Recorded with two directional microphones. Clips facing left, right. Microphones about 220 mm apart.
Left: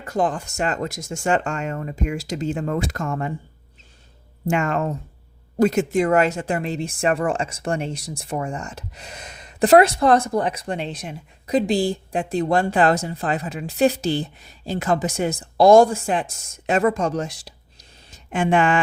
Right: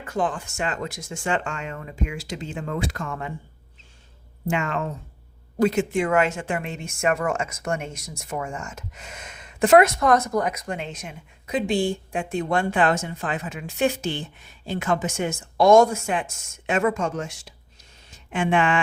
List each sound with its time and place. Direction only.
0.0 s speech: 40° left (ahead or behind)
4.4 s speech: 45° left (ahead or behind)